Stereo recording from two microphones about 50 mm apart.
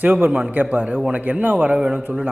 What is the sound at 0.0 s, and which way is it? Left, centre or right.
A man's voice, right.